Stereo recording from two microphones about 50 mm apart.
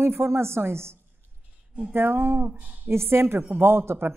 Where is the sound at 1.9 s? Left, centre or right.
Right.